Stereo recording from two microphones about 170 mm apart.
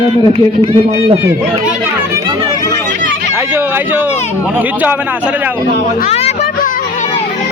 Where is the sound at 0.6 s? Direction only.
40° right (ahead or behind).